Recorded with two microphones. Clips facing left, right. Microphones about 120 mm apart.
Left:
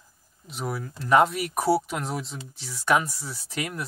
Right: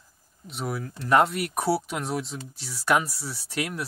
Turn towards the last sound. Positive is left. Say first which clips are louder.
# right 1 dB
turn(degrees=0)  # may be behind; listen again after turning